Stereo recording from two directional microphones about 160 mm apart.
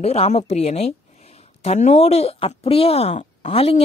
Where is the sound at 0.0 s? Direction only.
40° left (ahead or behind).